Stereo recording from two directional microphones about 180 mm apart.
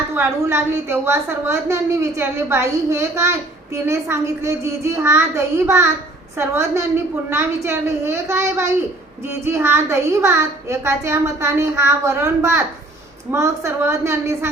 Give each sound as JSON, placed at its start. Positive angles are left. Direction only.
{"t": 0.1, "sound": "a woman's voice", "side_deg": -15}